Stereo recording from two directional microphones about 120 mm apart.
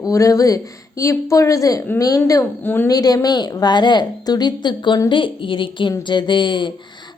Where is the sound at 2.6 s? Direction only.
15° left (ahead or behind).